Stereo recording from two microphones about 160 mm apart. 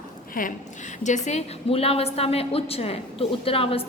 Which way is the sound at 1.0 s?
45° left (ahead or behind).